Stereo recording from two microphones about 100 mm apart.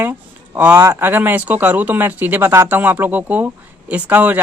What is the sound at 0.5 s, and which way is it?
Speech, 15° right (ahead or behind).